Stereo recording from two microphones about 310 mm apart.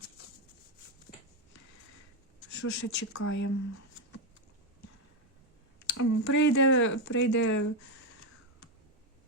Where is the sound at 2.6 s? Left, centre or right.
Left.